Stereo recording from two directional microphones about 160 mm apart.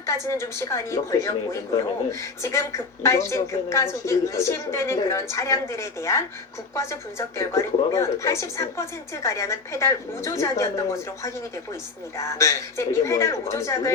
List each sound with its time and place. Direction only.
0.0 s speech: 20° left (ahead or behind)